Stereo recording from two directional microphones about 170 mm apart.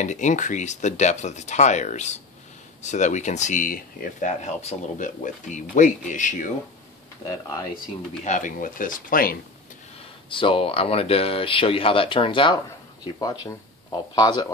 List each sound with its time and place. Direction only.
0.0 s speech: 45° left (ahead or behind)
7.2 s speech: 20° left (ahead or behind)
8.2 s speech: 45° left (ahead or behind)
10.3 s speech: 30° left (ahead or behind)